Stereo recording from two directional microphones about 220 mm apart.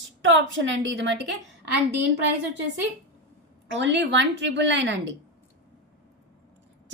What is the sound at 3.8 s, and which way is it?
Speech, 55° right (ahead or behind).